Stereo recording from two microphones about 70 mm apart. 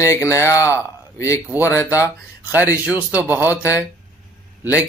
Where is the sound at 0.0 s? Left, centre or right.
Left.